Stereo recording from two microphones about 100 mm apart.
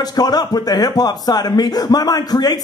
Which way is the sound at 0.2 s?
40° left (ahead or behind).